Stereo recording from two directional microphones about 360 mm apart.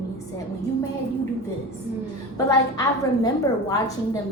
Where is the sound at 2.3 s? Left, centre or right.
Centre.